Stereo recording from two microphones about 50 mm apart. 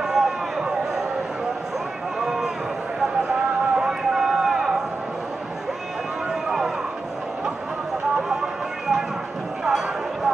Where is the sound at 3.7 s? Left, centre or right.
Centre.